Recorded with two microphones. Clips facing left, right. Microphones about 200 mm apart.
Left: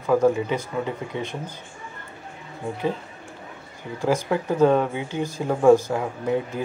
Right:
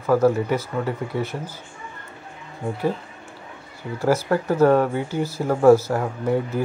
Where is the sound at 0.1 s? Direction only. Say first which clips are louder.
Right 1 dB; 15° left (ahead or behind).